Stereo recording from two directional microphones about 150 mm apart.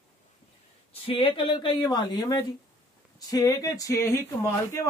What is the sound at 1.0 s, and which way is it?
A man's voice, 35° left (ahead or behind).